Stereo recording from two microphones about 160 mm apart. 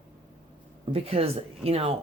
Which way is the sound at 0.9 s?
40° right (ahead or behind).